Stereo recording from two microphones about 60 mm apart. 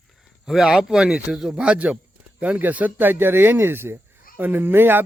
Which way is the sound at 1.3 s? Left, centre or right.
Centre.